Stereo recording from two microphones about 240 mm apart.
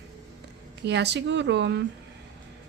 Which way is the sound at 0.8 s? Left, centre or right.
Right.